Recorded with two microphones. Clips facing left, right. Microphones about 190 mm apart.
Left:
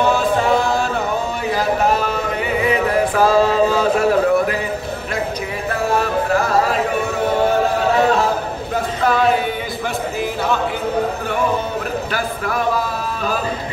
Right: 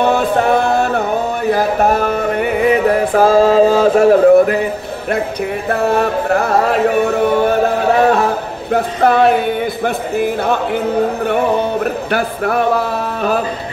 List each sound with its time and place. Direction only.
0.0 s music: 60° right (ahead or behind); by 4.6 s 45° right (ahead or behind)
5.7 s music: 60° right (ahead or behind)
8.0 s a sound: 55° right (ahead or behind)
8.7 s music: 60° right (ahead or behind)